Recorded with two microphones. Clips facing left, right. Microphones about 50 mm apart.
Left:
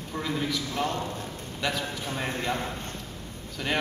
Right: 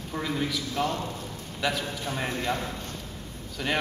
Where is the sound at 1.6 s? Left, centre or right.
Centre.